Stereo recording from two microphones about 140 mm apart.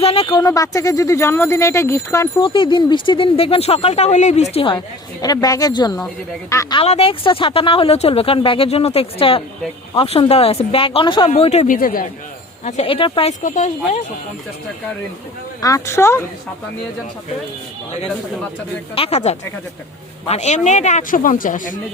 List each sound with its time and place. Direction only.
0.0 s speech: 40° left (ahead or behind)
0.3 s speech: 25° left (ahead or behind)
2.4 s speech: 35° left (ahead or behind); by 4.4 s 55° left (ahead or behind)
4.5 s speech: 35° left (ahead or behind)
6.8 s speech: 45° left (ahead or behind)
11.3 s speech: 50° left (ahead or behind)
11.7 s a man's voice: 85° left
12.6 s speech: 50° left (ahead or behind)
13.4 s speech: 60° left (ahead or behind)
15.6 s speech: 20° left (ahead or behind)
18.9 s speech: 45° left (ahead or behind); by 21.8 s 70° left (ahead or behind)